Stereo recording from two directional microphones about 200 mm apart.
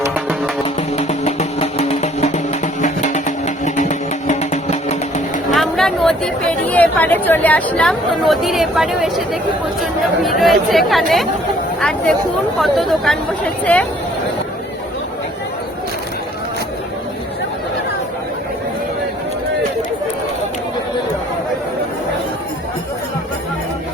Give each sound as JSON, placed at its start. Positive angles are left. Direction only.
{"t": 0.0, "sound": "music", "side_deg": -10}
{"t": 0.8, "sound": "music", "side_deg": 35}
{"t": 5.5, "sound": "chatter", "side_deg": 0}
{"t": 10.2, "sound": "speech", "side_deg": 0}